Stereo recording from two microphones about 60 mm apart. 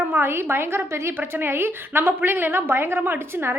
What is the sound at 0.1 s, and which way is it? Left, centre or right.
A woman's voice, right.